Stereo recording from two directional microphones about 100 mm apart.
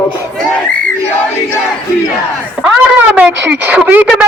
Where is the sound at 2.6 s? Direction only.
15° right (ahead or behind).